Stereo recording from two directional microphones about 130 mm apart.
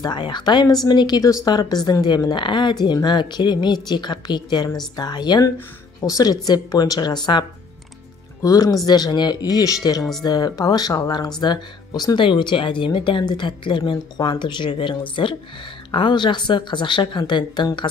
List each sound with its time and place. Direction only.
0.0 s speech: 35° left (ahead or behind)